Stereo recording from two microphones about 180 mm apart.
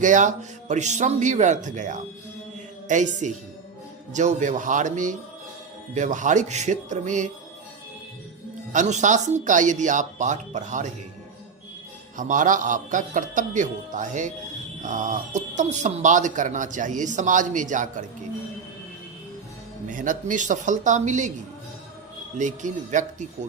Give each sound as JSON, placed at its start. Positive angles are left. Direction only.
{"t": 0.0, "sound": "speech", "side_deg": -45}
{"t": 8.7, "sound": "speech", "side_deg": -40}
{"t": 12.1, "sound": "speech", "side_deg": -45}
{"t": 19.9, "sound": "speech", "side_deg": -45}
{"t": 22.4, "sound": "speech", "side_deg": -45}